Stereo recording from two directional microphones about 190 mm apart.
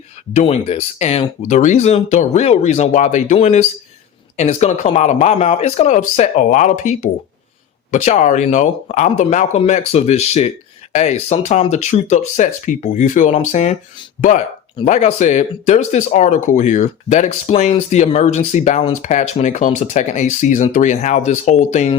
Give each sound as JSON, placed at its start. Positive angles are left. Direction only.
{"t": 0.3, "sound": "speech", "side_deg": 35}